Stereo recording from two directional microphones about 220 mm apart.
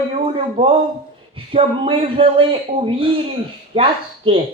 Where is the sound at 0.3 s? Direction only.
25° right (ahead or behind).